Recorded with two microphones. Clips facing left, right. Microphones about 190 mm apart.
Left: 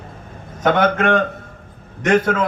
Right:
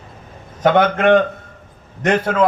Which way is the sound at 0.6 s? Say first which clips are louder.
Right 3 dB; 50° left (ahead or behind).